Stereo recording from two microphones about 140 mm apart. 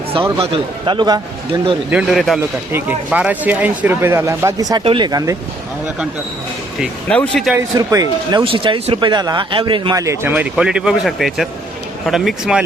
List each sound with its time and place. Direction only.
0.3 s speech: 40° right (ahead or behind)
1.9 s speech: 5° right (ahead or behind); by 4.8 s 25° right (ahead or behind)
4.8 s speech: 35° right (ahead or behind)
6.7 s speech: 5° left (ahead or behind)
7.8 s speech: 25° right (ahead or behind)
8.4 s speech: 35° right (ahead or behind)
9.9 s speech: 20° right (ahead or behind); by 12.6 s 5° right (ahead or behind)